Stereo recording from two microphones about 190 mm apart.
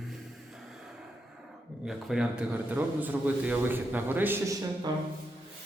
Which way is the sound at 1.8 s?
5° right (ahead or behind).